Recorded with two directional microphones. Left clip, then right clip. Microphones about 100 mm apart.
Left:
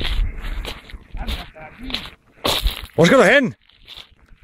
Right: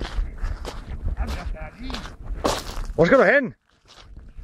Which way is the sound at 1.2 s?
25° right (ahead or behind).